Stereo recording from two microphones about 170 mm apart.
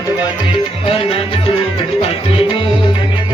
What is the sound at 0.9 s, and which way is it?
Music, 35° left (ahead or behind).